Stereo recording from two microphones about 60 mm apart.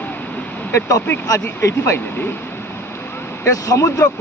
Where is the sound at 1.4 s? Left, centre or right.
Left.